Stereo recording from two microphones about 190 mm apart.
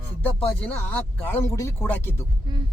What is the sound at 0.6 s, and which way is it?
Speech, 10° left (ahead or behind).